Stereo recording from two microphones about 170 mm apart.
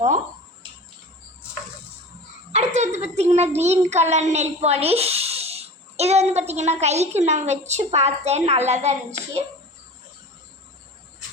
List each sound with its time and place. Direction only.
2.5 s a child's voice: 40° right (ahead or behind)